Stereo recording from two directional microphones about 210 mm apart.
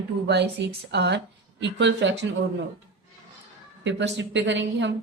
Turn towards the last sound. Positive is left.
turn(degrees=-60)  # may be behind; listen again after turning